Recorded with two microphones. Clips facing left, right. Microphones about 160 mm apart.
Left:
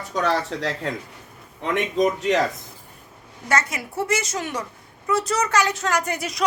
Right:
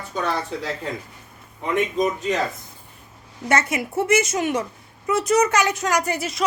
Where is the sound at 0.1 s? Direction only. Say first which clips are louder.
Left 2 dB; 90° left.